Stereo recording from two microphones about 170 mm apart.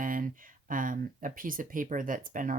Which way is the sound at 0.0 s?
55° right (ahead or behind).